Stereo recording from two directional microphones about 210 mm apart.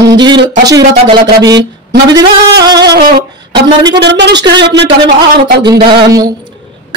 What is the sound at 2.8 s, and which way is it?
Speech, 50° right (ahead or behind).